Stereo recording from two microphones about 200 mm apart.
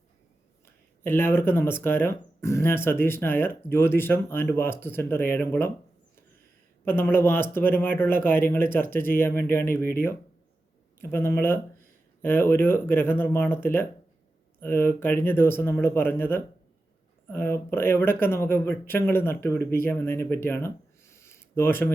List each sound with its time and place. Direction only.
1.0 s speech: 10° left (ahead or behind)
6.8 s speech: 10° left (ahead or behind)